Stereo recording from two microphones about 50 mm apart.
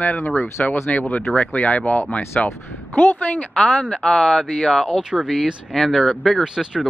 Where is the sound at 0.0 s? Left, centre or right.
Left.